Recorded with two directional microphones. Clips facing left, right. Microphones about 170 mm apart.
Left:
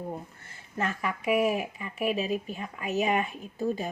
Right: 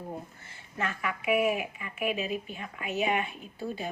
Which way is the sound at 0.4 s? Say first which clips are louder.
Left 4 dB; 40° left (ahead or behind).